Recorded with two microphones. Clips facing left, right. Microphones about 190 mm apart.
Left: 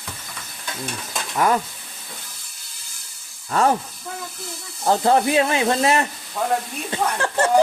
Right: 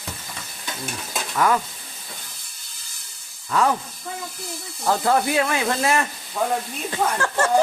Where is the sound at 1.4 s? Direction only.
30° left (ahead or behind).